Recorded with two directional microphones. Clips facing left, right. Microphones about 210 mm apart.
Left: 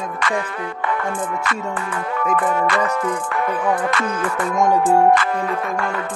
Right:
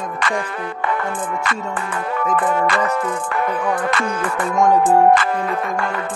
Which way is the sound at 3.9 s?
30° right (ahead or behind).